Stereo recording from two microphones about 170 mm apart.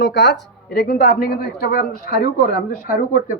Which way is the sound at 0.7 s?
75° left (ahead or behind).